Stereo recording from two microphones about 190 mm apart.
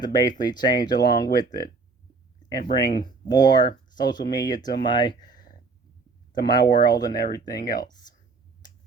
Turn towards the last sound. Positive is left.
turn(degrees=55)  # may be behind; listen again after turning